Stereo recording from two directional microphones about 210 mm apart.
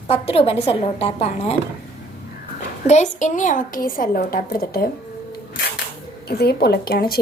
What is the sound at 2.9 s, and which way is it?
Speech, 35° left (ahead or behind).